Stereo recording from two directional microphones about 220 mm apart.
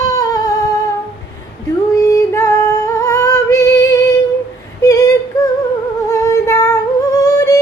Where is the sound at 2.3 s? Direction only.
10° left (ahead or behind).